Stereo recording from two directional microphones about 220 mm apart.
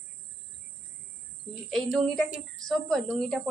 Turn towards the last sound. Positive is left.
turn(degrees=5)  # may be behind; listen again after turning